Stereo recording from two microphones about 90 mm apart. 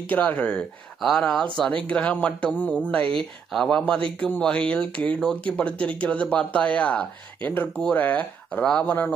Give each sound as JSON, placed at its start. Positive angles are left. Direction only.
{"t": 0.1, "sound": "speech", "side_deg": 15}